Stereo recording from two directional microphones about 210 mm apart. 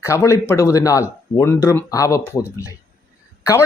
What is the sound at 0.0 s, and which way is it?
Speech, 15° left (ahead or behind).